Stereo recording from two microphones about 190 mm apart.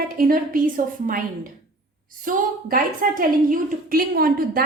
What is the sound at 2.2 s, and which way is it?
A woman's voice, 45° right (ahead or behind).